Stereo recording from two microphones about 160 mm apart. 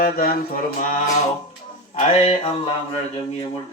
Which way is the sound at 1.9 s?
50° left (ahead or behind).